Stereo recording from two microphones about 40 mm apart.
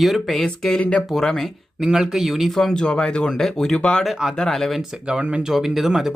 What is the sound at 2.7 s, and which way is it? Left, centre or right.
Speech, left.